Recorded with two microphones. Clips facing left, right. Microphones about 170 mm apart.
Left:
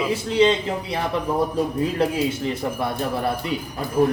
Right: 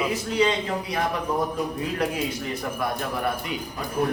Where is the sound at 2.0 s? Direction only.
30° left (ahead or behind).